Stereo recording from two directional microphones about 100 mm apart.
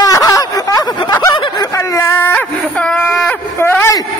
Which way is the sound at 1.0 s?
50° left (ahead or behind).